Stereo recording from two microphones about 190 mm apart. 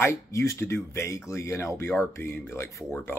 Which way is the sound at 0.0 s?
15° left (ahead or behind).